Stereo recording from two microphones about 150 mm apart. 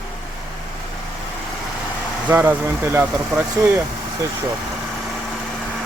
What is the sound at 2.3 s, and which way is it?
Speech, 15° right (ahead or behind).